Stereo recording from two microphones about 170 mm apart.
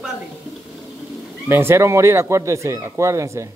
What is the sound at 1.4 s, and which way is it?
Speech, 15° right (ahead or behind).